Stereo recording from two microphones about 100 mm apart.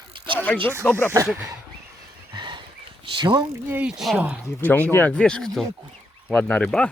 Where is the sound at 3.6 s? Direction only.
20° right (ahead or behind).